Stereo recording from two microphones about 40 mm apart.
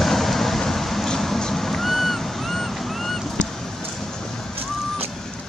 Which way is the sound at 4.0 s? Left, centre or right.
Centre.